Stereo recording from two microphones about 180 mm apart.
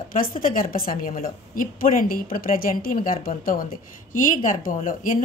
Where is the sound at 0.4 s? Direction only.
50° left (ahead or behind).